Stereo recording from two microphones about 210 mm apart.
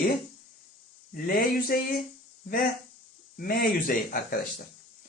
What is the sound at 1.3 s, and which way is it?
Speech, 45° left (ahead or behind).